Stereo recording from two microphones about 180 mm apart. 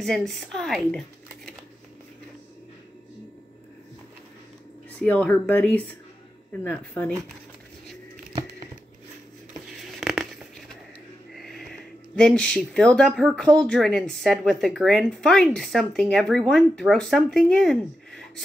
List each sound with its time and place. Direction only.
0.0 s speech: centre (ahead or behind)
4.9 s speech: 10° left (ahead or behind)
8.3 s biting: 20° right (ahead or behind)
9.9 s a sound: centre (ahead or behind)
11.3 s speech: centre (ahead or behind)